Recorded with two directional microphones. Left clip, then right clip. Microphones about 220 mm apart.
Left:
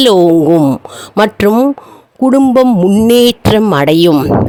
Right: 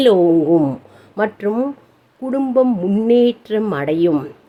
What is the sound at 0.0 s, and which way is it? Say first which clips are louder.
A woman's voice: left 5 dB; 45° left (ahead or behind).